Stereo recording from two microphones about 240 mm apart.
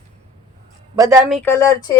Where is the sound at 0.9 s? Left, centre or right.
Centre.